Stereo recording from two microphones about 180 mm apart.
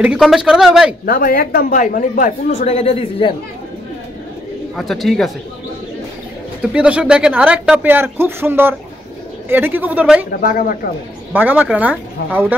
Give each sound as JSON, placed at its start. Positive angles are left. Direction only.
{"t": 0.0, "sound": "a man's voice", "side_deg": -5}
{"t": 1.0, "sound": "a woman's voice", "side_deg": 55}
{"t": 4.7, "sound": "a man's voice", "side_deg": 0}
{"t": 6.7, "sound": "speech", "side_deg": -5}
{"t": 10.4, "sound": "a woman's voice", "side_deg": 50}
{"t": 11.3, "sound": "speech", "side_deg": -10}